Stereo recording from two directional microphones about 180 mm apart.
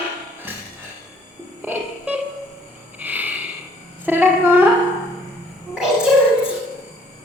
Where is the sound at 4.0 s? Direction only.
10° right (ahead or behind).